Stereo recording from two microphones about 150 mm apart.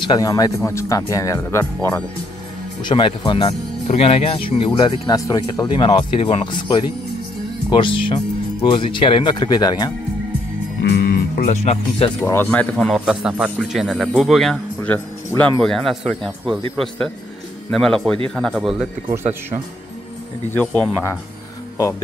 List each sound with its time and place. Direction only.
0.0 s speech: 25° left (ahead or behind)
2.8 s speech: 30° left (ahead or behind)
5.1 s speech: 25° left (ahead or behind)
10.9 s music: 90° left
11.4 s speech: 45° left (ahead or behind)
12.2 s a man's voice: 10° left (ahead or behind); by 18.9 s 5° right (ahead or behind)
20.5 s speech: 10° left (ahead or behind)